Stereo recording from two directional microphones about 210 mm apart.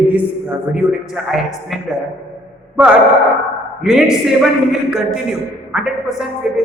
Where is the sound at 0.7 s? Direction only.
Centre (ahead or behind).